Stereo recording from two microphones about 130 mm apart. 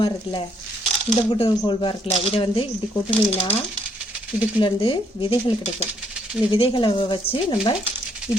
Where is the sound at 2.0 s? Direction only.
50° left (ahead or behind).